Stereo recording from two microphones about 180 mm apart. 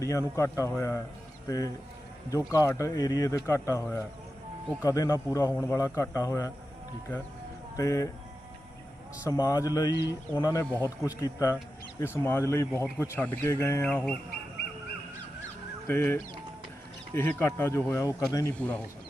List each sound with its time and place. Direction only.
0.0 s speech: 15° left (ahead or behind)
7.8 s speech: 15° left (ahead or behind)
9.2 s speech: 20° left (ahead or behind)
15.9 s speech: 15° left (ahead or behind)
18.5 s speech: 10° left (ahead or behind)